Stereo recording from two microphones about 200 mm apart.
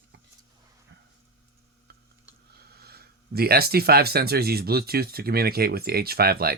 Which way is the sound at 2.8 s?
50° right (ahead or behind).